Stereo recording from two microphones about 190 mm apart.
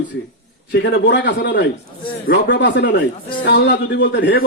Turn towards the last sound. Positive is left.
turn(degrees=70)  # may be behind; listen again after turning